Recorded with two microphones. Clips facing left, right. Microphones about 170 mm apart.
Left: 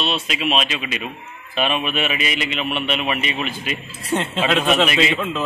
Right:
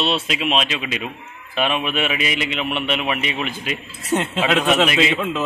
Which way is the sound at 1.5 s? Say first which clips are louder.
Even; 15° left (ahead or behind).